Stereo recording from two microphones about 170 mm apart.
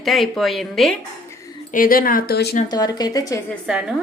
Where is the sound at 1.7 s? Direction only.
55° left (ahead or behind).